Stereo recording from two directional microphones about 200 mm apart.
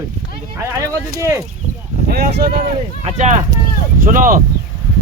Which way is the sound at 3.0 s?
35° right (ahead or behind).